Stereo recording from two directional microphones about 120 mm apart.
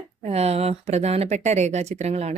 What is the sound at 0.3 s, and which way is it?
Speech, 60° right (ahead or behind).